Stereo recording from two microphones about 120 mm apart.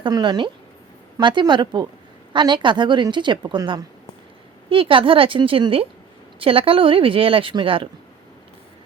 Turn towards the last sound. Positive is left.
turn(degrees=-45)  # may be behind; listen again after turning